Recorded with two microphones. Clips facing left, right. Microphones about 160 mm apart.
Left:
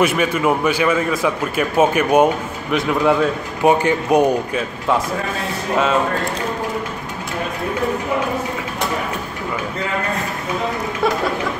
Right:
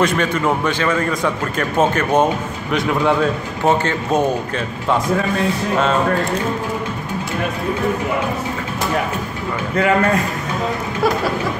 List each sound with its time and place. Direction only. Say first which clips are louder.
0.0 s a man's voice: left 1 dB; 10° left (ahead or behind)
3.6 s a man's voice: left 2 dB; 15° left (ahead or behind)